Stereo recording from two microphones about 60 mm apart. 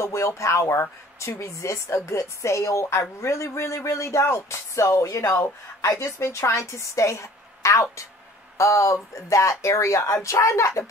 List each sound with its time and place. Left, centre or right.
0.0 s a woman's voice: left